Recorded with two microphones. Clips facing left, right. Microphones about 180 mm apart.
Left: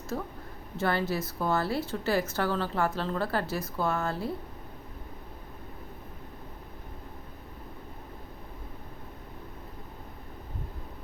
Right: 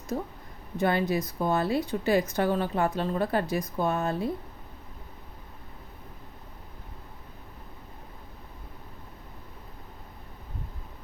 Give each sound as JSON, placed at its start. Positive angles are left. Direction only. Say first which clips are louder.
{"t": 0.8, "sound": "speech", "louder": "right 3 dB", "side_deg": -15}